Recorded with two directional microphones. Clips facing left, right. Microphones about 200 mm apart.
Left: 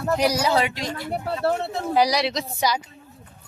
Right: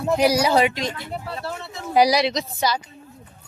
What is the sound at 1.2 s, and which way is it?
Speech, 60° left (ahead or behind).